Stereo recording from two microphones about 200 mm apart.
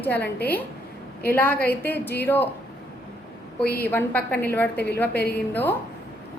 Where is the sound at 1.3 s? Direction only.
10° left (ahead or behind).